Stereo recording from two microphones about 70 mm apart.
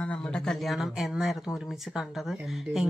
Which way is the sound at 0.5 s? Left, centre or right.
Centre.